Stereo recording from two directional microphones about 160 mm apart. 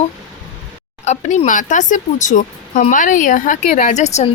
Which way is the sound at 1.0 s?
45° left (ahead or behind).